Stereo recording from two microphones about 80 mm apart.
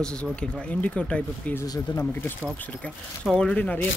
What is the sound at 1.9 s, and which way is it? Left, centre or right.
Speech, left.